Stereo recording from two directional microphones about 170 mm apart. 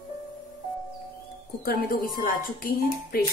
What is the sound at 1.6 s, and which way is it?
Speech, 55° left (ahead or behind).